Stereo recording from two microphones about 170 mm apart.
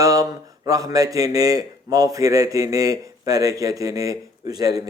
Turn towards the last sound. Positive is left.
turn(degrees=-20)  # may be behind; listen again after turning